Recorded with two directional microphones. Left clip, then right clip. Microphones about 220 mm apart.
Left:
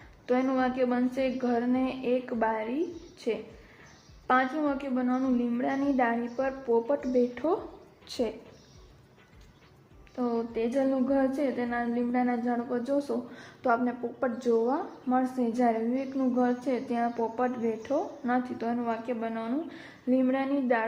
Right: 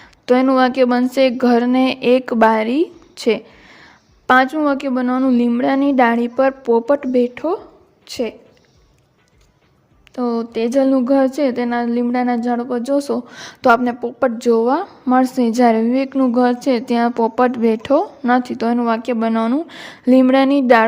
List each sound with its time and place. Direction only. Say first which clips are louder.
0.3 s a woman's voice: right 14 dB; 45° right (ahead or behind); by 8.3 s 25° right (ahead or behind)
10.2 s speech: right 10 dB; 45° right (ahead or behind)